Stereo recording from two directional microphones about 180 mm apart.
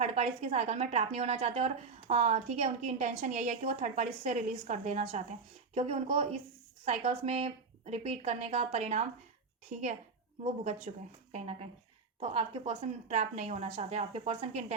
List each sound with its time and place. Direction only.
0.0 s a woman's voice: 35° right (ahead or behind)